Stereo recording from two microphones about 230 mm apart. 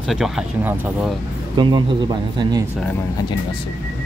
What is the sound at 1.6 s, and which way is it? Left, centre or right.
Speech, centre.